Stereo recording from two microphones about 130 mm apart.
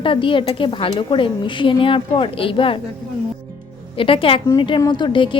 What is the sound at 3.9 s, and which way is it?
A woman's voice, 45° left (ahead or behind).